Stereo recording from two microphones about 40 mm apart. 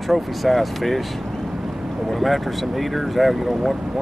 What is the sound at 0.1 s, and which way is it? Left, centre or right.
Speech, centre.